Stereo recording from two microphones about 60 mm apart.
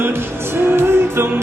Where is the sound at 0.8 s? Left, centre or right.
Right.